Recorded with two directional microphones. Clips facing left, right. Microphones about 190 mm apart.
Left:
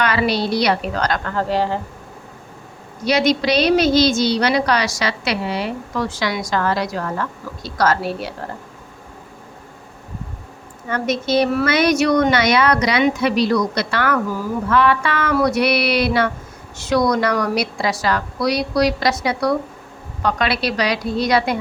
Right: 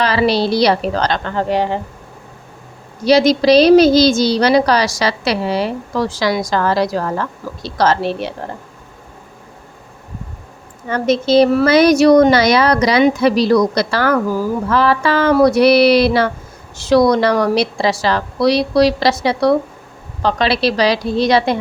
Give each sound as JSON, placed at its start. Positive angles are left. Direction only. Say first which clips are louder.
{"t": 0.0, "sound": "a woman's voice", "louder": "right 4 dB", "side_deg": -30}
{"t": 3.0, "sound": "a woman's voice", "louder": "right 6 dB", "side_deg": -35}
{"t": 10.8, "sound": "a woman's voice", "louder": "right 5 dB", "side_deg": -30}